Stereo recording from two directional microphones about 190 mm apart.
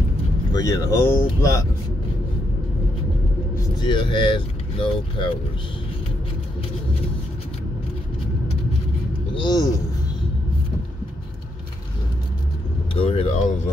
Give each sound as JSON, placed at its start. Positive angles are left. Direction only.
{"t": 0.5, "sound": "speech", "side_deg": 20}
{"t": 3.8, "sound": "speech", "side_deg": 25}
{"t": 9.4, "sound": "speech", "side_deg": 20}
{"t": 12.9, "sound": "speech", "side_deg": 30}